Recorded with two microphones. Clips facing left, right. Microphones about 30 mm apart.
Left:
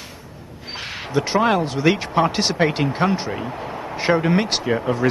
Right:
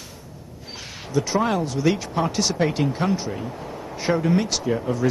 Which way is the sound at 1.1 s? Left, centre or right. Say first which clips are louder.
Left 3 dB; left.